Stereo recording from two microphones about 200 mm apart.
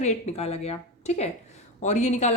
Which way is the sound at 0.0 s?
35° left (ahead or behind).